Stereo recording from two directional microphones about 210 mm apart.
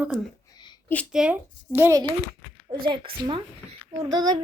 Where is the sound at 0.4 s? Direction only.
20° left (ahead or behind).